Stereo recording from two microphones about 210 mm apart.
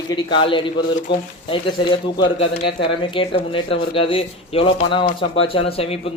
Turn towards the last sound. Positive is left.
turn(degrees=25)  # may be behind; listen again after turning